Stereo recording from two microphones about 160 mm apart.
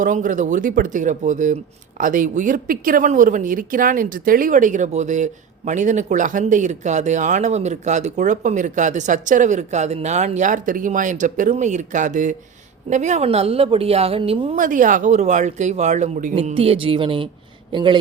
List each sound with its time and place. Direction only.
0.0 s a woman's voice: 55° right (ahead or behind); by 14.5 s 35° right (ahead or behind)
14.5 s speech: 55° right (ahead or behind)
16.3 s a woman's voice: 40° right (ahead or behind)